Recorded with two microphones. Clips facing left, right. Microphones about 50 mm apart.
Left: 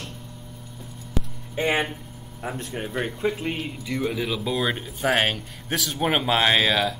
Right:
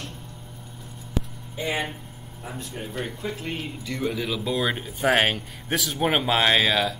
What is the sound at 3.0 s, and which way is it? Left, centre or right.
Speech, centre.